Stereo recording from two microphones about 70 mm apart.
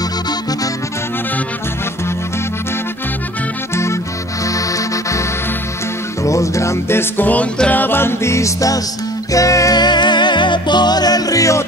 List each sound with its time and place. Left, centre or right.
3.7 s music: left
4.5 s music: left
6.2 s music: left
9.8 s music: left